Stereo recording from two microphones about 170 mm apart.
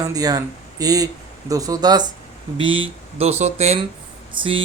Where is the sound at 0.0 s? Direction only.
20° right (ahead or behind).